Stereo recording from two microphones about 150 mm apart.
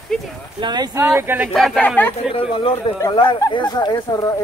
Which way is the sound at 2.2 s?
40° left (ahead or behind).